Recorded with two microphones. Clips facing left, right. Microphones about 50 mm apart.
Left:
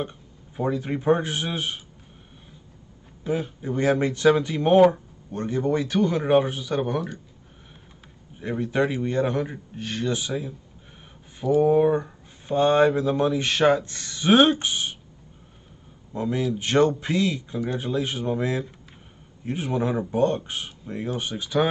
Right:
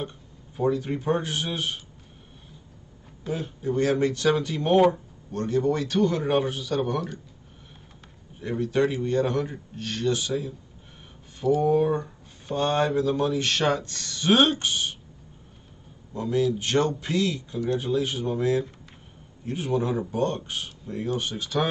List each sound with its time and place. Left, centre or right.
0.6 s speech: left
3.3 s speech: left
6.8 s speech: centre
8.4 s speech: left
11.6 s speech: centre
16.1 s speech: left